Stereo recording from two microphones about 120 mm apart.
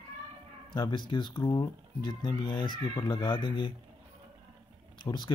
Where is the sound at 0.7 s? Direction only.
40° left (ahead or behind).